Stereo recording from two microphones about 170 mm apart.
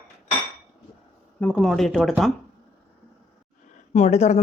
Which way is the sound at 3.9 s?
40° left (ahead or behind).